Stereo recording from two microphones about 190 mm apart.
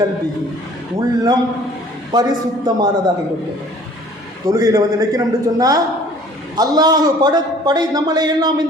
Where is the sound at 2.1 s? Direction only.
20° right (ahead or behind).